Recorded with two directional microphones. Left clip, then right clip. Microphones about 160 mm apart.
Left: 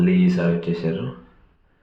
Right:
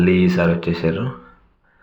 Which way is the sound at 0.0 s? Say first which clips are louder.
Right 5 dB; 20° right (ahead or behind).